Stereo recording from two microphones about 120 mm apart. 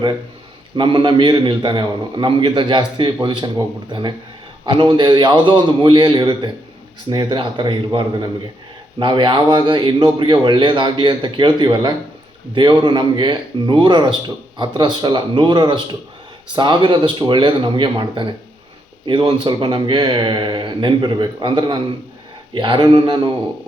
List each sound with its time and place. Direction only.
0.8 s speech: 40° right (ahead or behind)
4.6 s a man's voice: 40° right (ahead or behind)